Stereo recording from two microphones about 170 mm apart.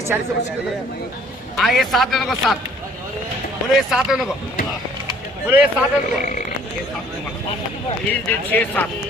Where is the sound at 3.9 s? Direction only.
Centre (ahead or behind).